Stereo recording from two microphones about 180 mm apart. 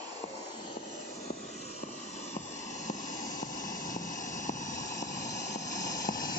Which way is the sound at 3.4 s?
45° left (ahead or behind).